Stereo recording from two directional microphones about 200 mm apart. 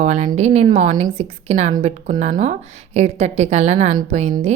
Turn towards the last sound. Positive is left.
turn(degrees=-35)  # may be behind; listen again after turning